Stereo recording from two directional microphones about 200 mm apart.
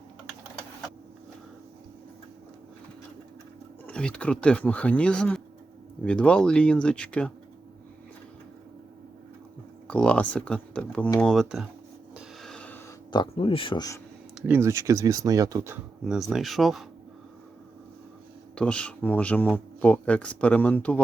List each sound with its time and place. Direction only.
3.8 s speech: 5° left (ahead or behind)
9.8 s speech: 5° left (ahead or behind)
12.1 s rub: centre (ahead or behind)
13.1 s speech: 25° left (ahead or behind)
14.4 s speech: 10° right (ahead or behind)
16.3 s speech: centre (ahead or behind)
18.5 s speech: 5° left (ahead or behind)